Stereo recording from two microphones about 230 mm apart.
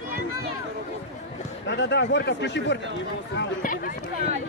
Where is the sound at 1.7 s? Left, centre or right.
Left.